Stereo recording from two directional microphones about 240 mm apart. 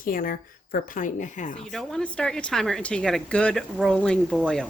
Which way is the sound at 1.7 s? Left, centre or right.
Centre.